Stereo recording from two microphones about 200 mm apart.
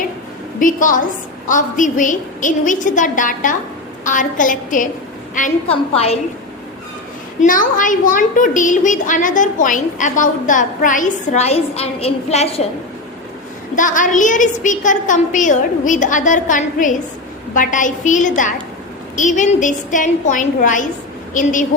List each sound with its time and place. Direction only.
0.6 s a woman's voice: 40° left (ahead or behind)
5.6 s a woman's voice: 30° left (ahead or behind)
7.4 s a woman's voice: 40° left (ahead or behind)
13.7 s a woman's voice: 40° left (ahead or behind)